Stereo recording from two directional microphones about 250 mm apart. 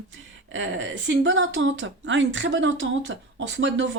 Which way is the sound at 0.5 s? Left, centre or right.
Right.